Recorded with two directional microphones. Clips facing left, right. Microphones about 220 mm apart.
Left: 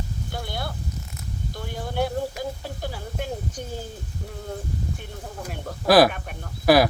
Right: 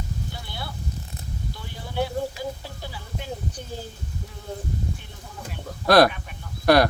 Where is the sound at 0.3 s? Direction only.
50° left (ahead or behind).